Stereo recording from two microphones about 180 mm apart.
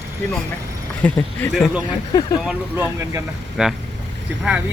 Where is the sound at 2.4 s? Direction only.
15° right (ahead or behind).